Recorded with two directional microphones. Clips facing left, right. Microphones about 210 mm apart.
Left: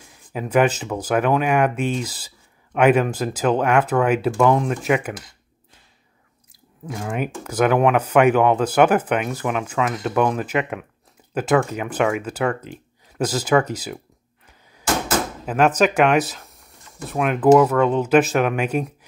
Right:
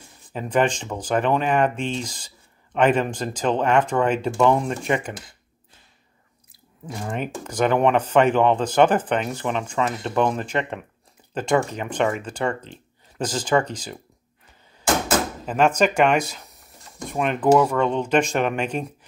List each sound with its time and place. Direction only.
0.3 s speech: 10° left (ahead or behind)
6.9 s speech: 5° left (ahead or behind)
15.4 s speech: 5° left (ahead or behind)